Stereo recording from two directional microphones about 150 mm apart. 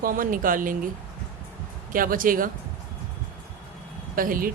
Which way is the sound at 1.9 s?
70° right (ahead or behind).